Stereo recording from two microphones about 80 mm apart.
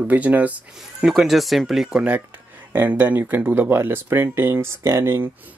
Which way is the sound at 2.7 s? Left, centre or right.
Right.